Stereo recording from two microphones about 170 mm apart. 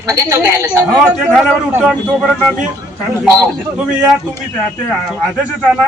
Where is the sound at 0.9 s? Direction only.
Centre (ahead or behind).